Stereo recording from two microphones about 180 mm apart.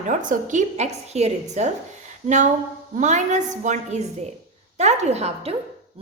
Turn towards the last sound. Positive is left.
turn(degrees=-35)  # may be behind; listen again after turning